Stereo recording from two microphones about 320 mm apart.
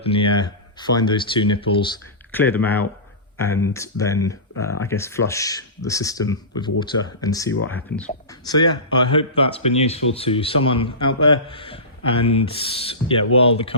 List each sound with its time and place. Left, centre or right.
0.0 s speech: centre